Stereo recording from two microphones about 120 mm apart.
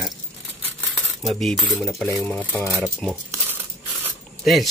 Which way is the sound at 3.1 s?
20° right (ahead or behind).